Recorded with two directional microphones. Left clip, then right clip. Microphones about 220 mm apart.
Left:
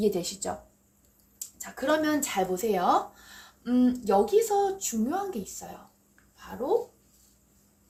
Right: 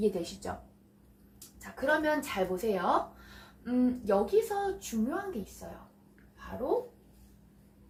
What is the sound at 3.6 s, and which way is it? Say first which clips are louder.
Speech: left 4 dB; 50° left (ahead or behind).